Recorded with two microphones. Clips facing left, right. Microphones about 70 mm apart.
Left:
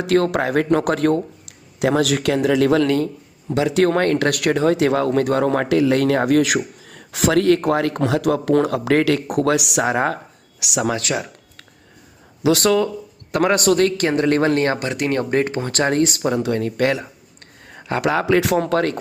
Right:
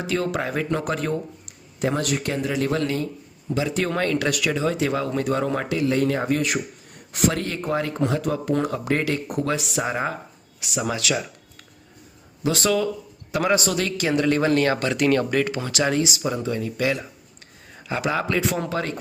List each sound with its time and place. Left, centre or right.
0.0 s speech: left
11.1 s a sound: left
12.4 s speech: left
14.5 s speech: left